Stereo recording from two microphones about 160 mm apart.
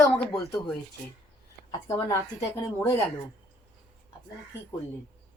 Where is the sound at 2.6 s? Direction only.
15° left (ahead or behind).